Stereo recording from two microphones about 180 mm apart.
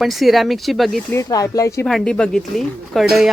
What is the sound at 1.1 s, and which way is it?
Speech, 20° left (ahead or behind).